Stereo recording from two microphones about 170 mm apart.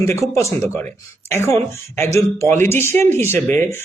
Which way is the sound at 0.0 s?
15° left (ahead or behind).